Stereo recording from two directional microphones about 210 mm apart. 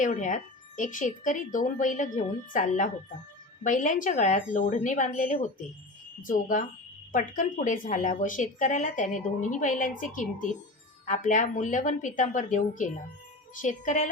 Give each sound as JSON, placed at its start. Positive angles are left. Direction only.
{"t": 0.0, "sound": "a woman's voice", "side_deg": 35}